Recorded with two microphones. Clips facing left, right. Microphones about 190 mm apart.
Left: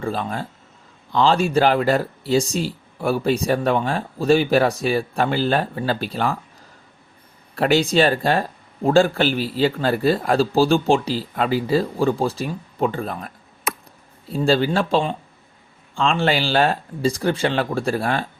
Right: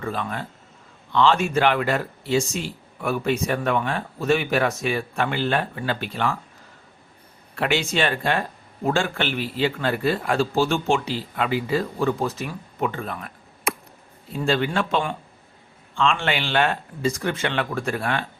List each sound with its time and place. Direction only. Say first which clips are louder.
0.0 s speech: left 3 dB; 35° left (ahead or behind)
7.5 s speech: left 6 dB; 35° left (ahead or behind)